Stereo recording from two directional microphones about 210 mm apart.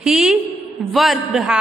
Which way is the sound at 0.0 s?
Centre (ahead or behind).